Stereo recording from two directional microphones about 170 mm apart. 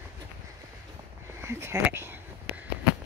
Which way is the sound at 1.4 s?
15° right (ahead or behind).